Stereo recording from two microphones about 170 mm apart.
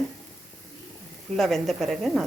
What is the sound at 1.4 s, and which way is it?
Speech, centre (ahead or behind).